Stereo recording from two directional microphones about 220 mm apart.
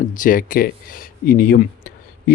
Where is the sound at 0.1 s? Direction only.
40° left (ahead or behind).